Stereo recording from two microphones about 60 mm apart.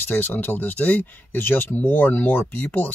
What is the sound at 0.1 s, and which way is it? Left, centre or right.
Speech, left.